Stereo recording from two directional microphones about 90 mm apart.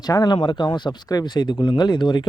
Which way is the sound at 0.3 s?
60° left (ahead or behind).